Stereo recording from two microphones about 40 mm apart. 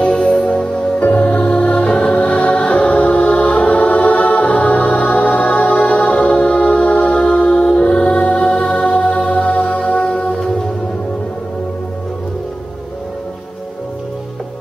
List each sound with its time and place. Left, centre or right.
0.3 s music: left